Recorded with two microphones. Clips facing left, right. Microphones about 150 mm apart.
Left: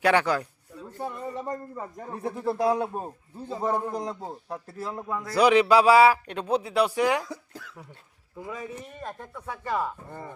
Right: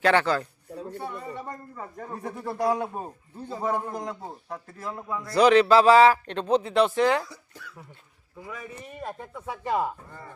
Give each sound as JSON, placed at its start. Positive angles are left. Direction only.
{"t": 0.0, "sound": "a man's voice", "side_deg": 10}
{"t": 1.5, "sound": "speech", "side_deg": 20}
{"t": 2.7, "sound": "a man's voice", "side_deg": 0}
{"t": 8.4, "sound": "a man's voice", "side_deg": 20}
{"t": 8.9, "sound": "speech", "side_deg": -10}
{"t": 10.1, "sound": "speech", "side_deg": 20}